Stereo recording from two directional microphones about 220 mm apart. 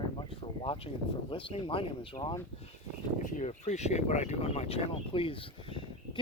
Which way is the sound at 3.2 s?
35° left (ahead or behind).